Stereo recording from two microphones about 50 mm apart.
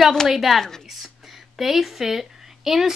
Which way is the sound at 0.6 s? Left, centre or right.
Centre.